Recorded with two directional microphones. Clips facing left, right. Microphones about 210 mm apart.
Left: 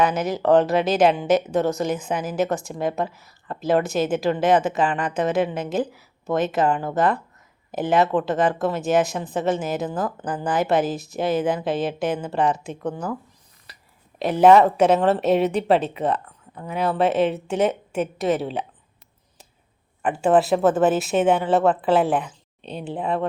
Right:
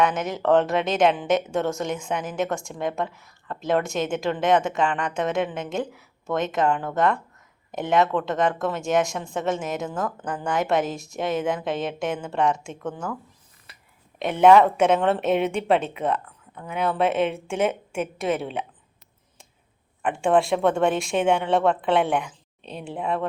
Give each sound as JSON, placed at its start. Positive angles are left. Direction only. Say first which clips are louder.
{"t": 0.0, "sound": "speech", "louder": "left 2 dB", "side_deg": 0}
{"t": 14.2, "sound": "speech", "louder": "left 4 dB", "side_deg": 30}
{"t": 14.4, "sound": "speech", "louder": "left 1 dB", "side_deg": 0}
{"t": 15.2, "sound": "speech", "louder": "left 3 dB", "side_deg": 35}
{"t": 18.3, "sound": "speech", "louder": "left 3 dB", "side_deg": 0}
{"t": 20.0, "sound": "speech", "louder": "left 2 dB", "side_deg": 5}
{"t": 22.2, "sound": "a sound", "louder": "left 2 dB", "side_deg": 30}
{"t": 22.8, "sound": "speech", "louder": "left 2 dB", "side_deg": 0}